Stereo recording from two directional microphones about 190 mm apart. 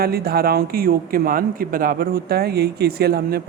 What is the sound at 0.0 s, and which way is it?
Speech, 55° right (ahead or behind).